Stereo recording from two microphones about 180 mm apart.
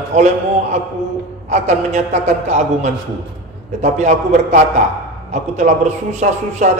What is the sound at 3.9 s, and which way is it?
A man's voice, 40° right (ahead or behind).